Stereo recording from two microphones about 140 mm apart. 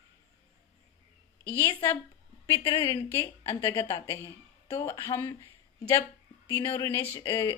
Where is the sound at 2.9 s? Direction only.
20° left (ahead or behind).